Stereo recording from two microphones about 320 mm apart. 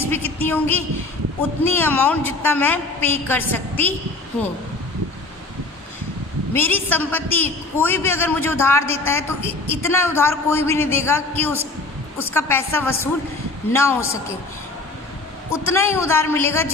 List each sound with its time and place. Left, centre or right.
0.0 s a woman's voice: centre
6.5 s a man's voice: centre
9.4 s a woman's voice: centre
9.8 s a man's voice: centre
15.6 s a man's voice: centre